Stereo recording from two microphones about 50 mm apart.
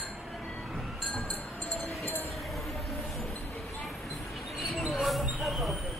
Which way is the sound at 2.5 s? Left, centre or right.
Centre.